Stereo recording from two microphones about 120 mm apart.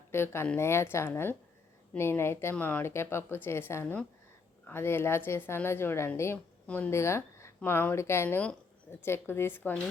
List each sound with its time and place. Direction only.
0.1 s a woman's voice: 20° left (ahead or behind)
6.9 s speech: 20° left (ahead or behind)